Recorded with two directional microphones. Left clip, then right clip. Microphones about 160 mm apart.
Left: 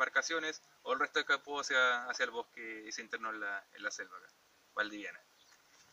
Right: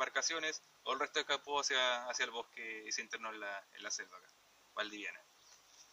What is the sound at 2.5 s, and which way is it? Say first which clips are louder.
Speech: right 2 dB; 40° left (ahead or behind).